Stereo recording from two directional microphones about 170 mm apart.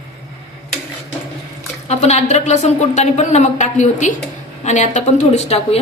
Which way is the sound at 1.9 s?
40° left (ahead or behind).